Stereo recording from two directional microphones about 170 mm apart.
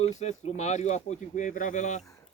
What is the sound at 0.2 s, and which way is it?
Speech, 40° left (ahead or behind).